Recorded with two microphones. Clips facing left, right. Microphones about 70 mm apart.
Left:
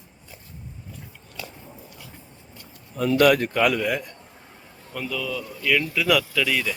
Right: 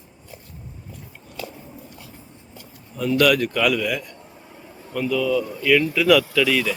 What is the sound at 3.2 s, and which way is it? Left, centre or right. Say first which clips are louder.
Speech: even; left.